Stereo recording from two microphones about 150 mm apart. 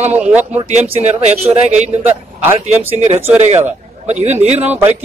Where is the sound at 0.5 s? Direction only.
45° right (ahead or behind).